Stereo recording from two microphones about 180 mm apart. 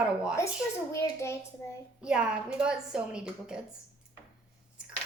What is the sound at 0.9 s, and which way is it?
Speech, 15° left (ahead or behind).